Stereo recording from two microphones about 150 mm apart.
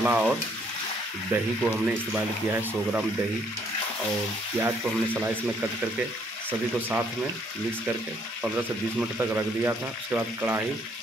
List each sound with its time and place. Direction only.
0.0 s speech: 10° right (ahead or behind)
4.6 s speech: 15° right (ahead or behind)
9.2 s speech: 15° right (ahead or behind)